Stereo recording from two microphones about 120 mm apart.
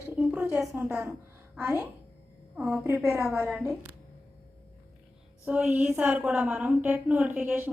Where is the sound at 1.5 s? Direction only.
15° right (ahead or behind).